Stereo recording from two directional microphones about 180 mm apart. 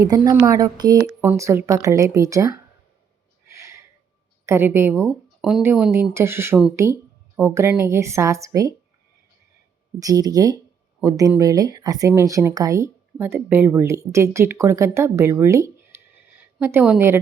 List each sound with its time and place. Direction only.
0.0 s speech: 20° right (ahead or behind)
3.4 s a sound: 15° right (ahead or behind)
4.4 s speech: 15° right (ahead or behind)
5.0 s speech: centre (ahead or behind)
5.9 s speech: 15° right (ahead or behind)
10.0 s speech: 20° right (ahead or behind)